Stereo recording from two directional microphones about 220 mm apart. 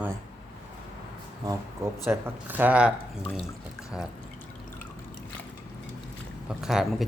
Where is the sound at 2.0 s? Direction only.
10° right (ahead or behind).